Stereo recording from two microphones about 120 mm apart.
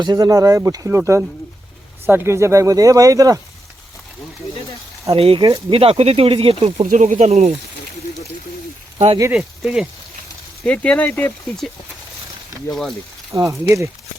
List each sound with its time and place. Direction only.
0.0 s speech: 35° right (ahead or behind)
5.1 s speech: 50° right (ahead or behind)
6.9 s speech: 80° right
9.3 s speech: 5° right (ahead or behind)
10.6 s speech: 10° left (ahead or behind)
12.6 s speech: centre (ahead or behind)
13.3 s speech: 25° right (ahead or behind)